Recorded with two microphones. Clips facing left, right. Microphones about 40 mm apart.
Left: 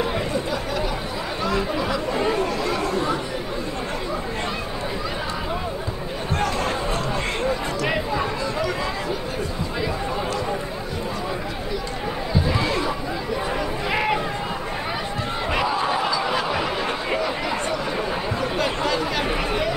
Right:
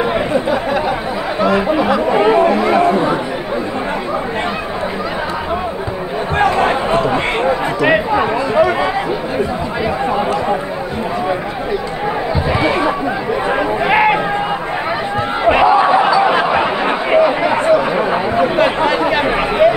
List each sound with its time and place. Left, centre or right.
0.0 s chatter: right
6.3 s chatter: right
10.0 s chatter: right
12.5 s chatter: right
15.4 s a sound: right